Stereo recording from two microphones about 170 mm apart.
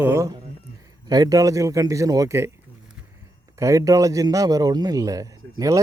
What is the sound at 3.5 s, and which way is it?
A man's voice, 20° right (ahead or behind).